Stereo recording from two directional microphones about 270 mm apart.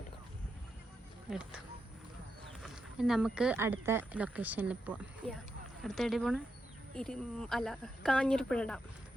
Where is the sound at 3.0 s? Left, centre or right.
Centre.